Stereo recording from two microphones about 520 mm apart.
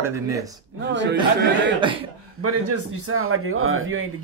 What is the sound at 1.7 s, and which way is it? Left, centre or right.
Speech, centre.